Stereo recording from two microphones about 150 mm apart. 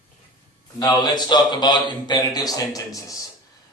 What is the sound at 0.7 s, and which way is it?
Speech, 30° left (ahead or behind).